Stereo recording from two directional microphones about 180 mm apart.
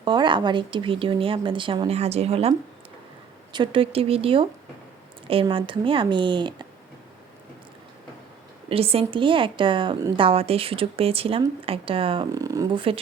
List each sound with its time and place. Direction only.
0.0 s a woman's voice: 25° right (ahead or behind)
8.7 s a woman's voice: 30° right (ahead or behind)